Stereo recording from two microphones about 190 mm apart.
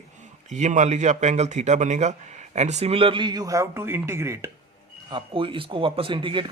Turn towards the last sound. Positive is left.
turn(degrees=-25)  # may be behind; listen again after turning